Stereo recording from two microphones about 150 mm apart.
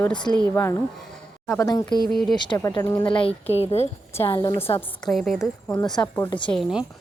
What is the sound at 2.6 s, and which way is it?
Speech, 20° left (ahead or behind).